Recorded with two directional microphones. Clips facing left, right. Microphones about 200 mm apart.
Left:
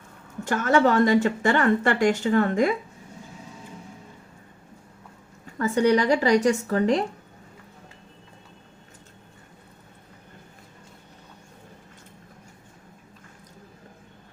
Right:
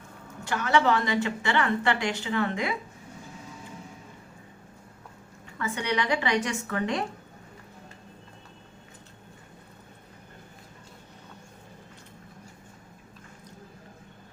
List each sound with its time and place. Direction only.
0.4 s a woman's voice: 45° left (ahead or behind)
5.5 s speech: 40° left (ahead or behind)